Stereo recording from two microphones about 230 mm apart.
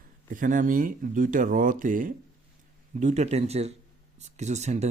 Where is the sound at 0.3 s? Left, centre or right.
Right.